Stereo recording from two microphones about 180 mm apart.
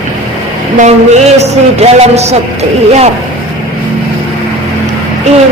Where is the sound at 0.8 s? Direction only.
40° right (ahead or behind).